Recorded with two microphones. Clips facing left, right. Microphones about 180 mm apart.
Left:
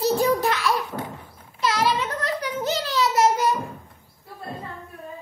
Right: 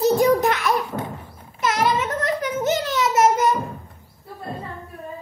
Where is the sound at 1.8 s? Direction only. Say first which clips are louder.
Right 4 dB; 20° right (ahead or behind).